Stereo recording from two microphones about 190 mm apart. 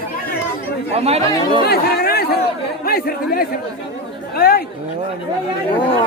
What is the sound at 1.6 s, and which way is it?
Speech, 55° left (ahead or behind).